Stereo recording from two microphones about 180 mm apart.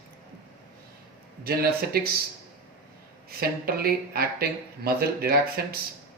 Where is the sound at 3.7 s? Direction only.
60° right (ahead or behind).